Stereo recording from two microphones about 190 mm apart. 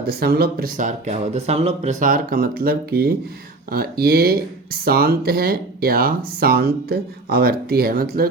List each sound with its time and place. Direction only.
0.0 s speech: 55° right (ahead or behind)